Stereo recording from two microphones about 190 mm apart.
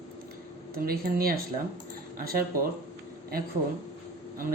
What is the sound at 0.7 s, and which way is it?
Speech, 50° right (ahead or behind).